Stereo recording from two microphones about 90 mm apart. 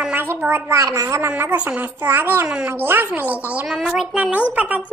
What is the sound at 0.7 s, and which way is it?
Speech, 40° right (ahead or behind).